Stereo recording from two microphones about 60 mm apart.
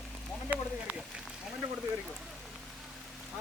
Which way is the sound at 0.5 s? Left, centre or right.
Right.